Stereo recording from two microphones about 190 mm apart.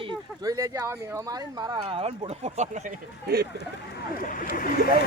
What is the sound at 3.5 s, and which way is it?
Speech, 50° left (ahead or behind).